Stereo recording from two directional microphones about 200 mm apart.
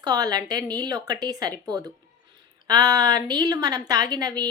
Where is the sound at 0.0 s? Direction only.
20° right (ahead or behind).